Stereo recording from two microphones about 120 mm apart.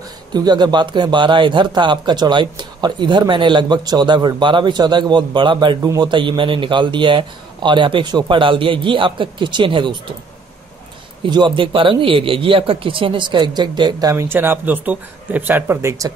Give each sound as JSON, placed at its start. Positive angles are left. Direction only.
{"t": 0.3, "sound": "a man's voice", "side_deg": -35}
{"t": 11.2, "sound": "a man's voice", "side_deg": -40}
{"t": 14.1, "sound": "speech", "side_deg": -20}